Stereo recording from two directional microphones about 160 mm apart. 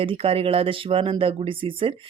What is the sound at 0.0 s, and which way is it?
Speech, 35° right (ahead or behind).